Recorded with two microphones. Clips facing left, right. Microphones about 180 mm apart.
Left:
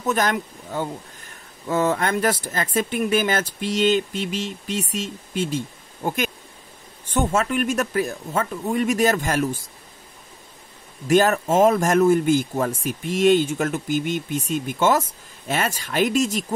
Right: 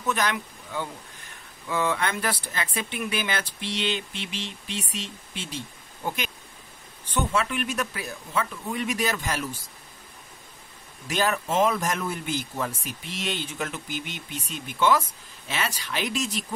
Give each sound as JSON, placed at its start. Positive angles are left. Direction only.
{"t": 0.0, "sound": "speech", "side_deg": 45}
{"t": 11.1, "sound": "speech", "side_deg": 45}